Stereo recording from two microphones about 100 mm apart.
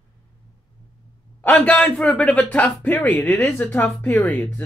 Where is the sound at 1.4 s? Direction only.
15° left (ahead or behind).